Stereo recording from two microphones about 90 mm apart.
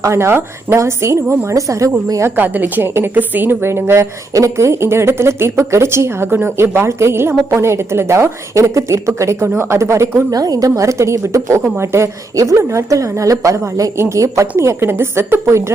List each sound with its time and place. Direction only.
0.0 s a woman's voice: 30° right (ahead or behind)
2.3 s a woman's voice: 20° right (ahead or behind)